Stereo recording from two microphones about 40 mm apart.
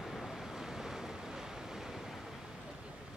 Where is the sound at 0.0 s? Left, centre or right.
Centre.